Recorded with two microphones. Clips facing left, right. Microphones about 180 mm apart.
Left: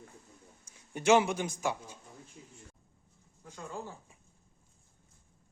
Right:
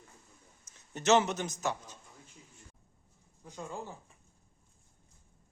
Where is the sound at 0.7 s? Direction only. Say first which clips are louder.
Left 1 dB; 10° left (ahead or behind).